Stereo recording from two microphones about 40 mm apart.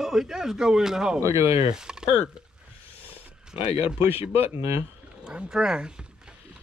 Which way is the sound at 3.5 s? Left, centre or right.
Right.